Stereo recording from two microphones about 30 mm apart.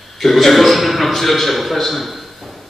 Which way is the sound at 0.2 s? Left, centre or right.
Centre.